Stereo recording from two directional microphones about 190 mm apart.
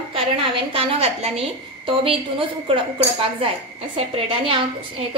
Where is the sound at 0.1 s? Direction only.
30° right (ahead or behind).